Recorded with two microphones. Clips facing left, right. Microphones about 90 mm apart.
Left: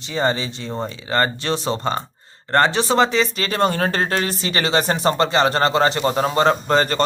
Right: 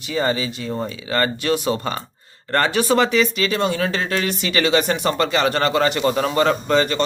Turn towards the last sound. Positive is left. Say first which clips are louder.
# even
turn(degrees=40)  # may be behind; listen again after turning